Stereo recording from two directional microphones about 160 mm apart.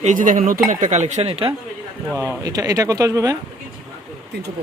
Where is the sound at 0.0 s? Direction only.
50° right (ahead or behind).